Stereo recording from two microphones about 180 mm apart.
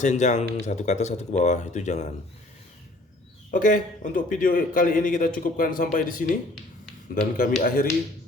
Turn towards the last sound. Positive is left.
turn(degrees=50)  # may be behind; listen again after turning